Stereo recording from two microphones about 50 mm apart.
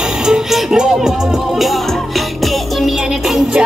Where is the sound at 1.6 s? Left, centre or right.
Centre.